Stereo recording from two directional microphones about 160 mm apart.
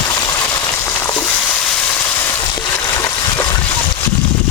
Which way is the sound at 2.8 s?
25° left (ahead or behind).